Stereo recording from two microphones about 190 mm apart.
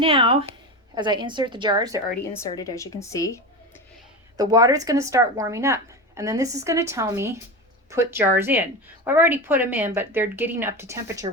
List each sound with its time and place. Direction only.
0.0 s a woman's voice: 30° right (ahead or behind)
2.3 s a woman's voice: 15° left (ahead or behind)
4.4 s speech: 20° right (ahead or behind)